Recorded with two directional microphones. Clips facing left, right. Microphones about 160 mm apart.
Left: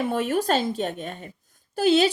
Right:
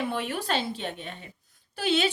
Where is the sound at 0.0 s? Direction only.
45° left (ahead or behind).